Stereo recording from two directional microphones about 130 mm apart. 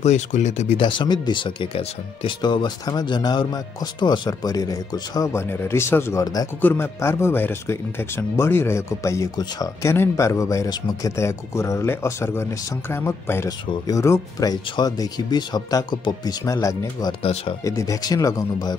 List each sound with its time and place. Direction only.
0.0 s speech: 65° left (ahead or behind)
0.7 s speech: 40° left (ahead or behind)
17.2 s speech: 45° left (ahead or behind)
17.6 s speech: 25° left (ahead or behind)